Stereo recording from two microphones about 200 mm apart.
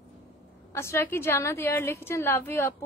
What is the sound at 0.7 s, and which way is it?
A woman's voice, 10° left (ahead or behind).